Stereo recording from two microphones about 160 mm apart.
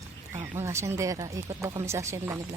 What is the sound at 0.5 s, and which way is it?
Speech, 15° right (ahead or behind).